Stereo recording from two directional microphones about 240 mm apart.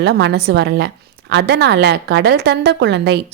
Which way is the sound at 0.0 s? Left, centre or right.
Right.